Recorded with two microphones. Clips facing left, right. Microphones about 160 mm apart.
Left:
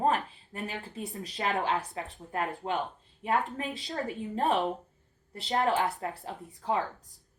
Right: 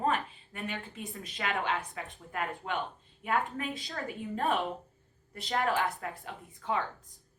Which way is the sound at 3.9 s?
25° left (ahead or behind).